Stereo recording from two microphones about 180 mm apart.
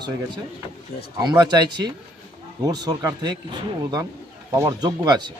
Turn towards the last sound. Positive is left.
turn(degrees=-20)  # may be behind; listen again after turning